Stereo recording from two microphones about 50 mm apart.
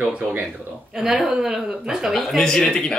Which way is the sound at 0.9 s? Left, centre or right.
Centre.